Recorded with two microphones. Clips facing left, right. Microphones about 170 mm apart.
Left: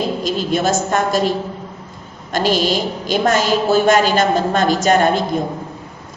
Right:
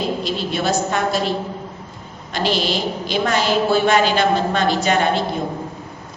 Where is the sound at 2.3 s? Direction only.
45° left (ahead or behind).